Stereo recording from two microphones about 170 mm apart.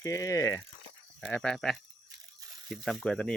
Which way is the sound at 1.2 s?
5° left (ahead or behind).